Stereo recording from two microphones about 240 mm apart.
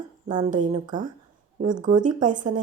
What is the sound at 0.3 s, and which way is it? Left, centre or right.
Speech, right.